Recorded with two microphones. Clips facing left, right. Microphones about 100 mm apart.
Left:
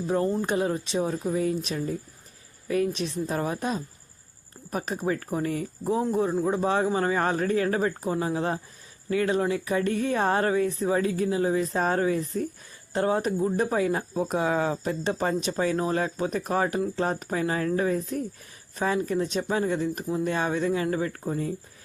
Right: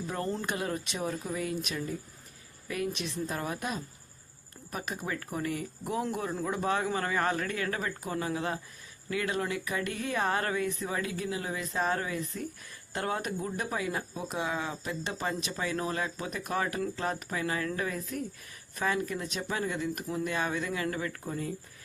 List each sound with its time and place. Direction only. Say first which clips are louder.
0.1 s speech: left 9 dB; 20° left (ahead or behind); by 21.5 s 35° left (ahead or behind)